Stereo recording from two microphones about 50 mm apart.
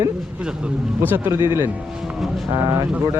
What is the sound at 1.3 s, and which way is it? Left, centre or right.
Speech, right.